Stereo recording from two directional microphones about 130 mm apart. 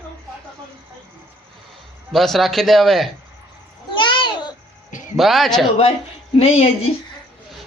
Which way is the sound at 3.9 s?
40° left (ahead or behind).